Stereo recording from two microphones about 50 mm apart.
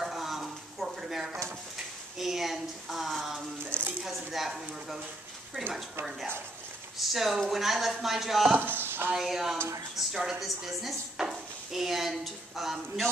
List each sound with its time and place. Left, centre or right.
0.0 s a sound: centre
2.1 s speech: centre
3.7 s a sound: right
4.1 s speech: centre
7.0 s speech: centre
8.5 s speech: right
9.1 s a woman's voice: centre